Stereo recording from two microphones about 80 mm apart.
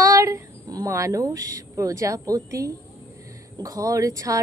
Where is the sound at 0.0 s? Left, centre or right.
Right.